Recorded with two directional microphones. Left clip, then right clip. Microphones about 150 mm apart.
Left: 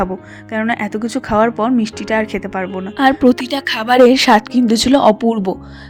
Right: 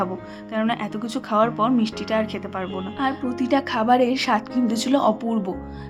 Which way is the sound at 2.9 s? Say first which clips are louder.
Left 13 dB; 60° left (ahead or behind).